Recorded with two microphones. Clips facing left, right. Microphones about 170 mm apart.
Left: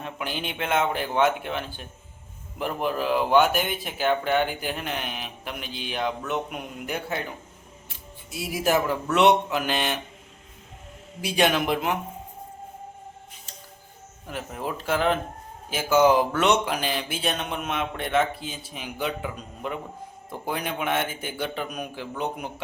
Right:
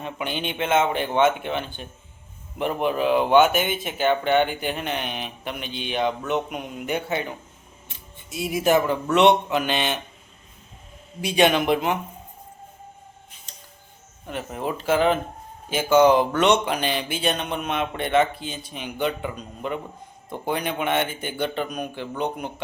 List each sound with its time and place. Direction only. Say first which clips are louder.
0.0 s speech: right 3 dB; centre (ahead or behind)
11.2 s speech: right 3 dB; centre (ahead or behind)
14.3 s speech: right 3 dB; centre (ahead or behind)